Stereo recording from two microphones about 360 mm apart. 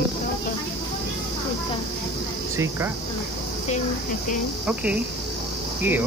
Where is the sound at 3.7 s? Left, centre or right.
Left.